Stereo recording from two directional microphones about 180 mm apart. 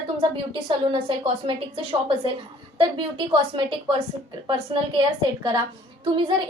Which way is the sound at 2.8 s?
30° right (ahead or behind).